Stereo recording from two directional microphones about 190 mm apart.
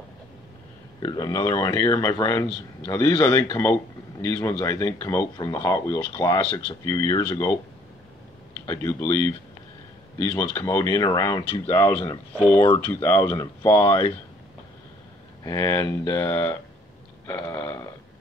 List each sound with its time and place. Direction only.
1.0 s speech: 20° left (ahead or behind)
8.6 s speech: 15° left (ahead or behind)
15.4 s speech: 15° left (ahead or behind)
17.3 s a sound: 10° left (ahead or behind)